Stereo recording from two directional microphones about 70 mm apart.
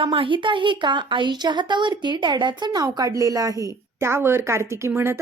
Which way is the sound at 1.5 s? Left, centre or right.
Right.